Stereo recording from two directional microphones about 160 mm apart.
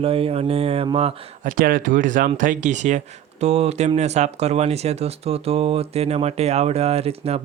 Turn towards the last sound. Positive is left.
turn(degrees=-40)  # may be behind; listen again after turning